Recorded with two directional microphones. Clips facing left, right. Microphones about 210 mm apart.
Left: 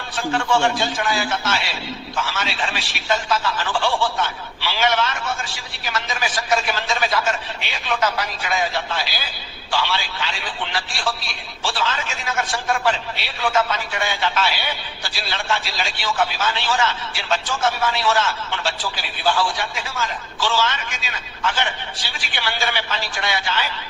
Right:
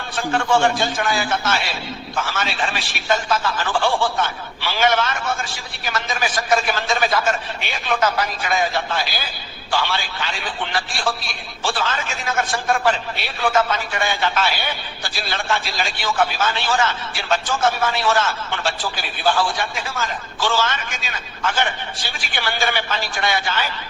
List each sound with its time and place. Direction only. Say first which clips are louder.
0.2 s a man's voice: right 2 dB; 55° right (ahead or behind)